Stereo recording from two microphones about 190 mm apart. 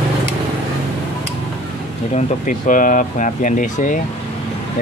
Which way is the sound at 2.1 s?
45° left (ahead or behind).